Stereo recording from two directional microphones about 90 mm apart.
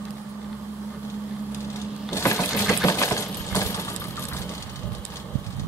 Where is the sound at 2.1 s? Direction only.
30° left (ahead or behind).